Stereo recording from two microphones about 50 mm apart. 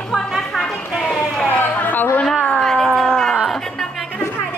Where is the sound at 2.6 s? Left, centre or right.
Centre.